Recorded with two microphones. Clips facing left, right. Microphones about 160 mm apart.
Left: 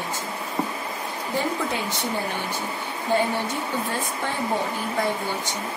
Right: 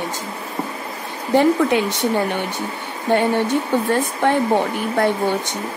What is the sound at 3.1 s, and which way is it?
Speech, 70° right (ahead or behind).